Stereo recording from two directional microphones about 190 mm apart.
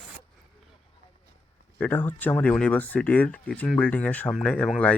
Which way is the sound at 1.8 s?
10° left (ahead or behind).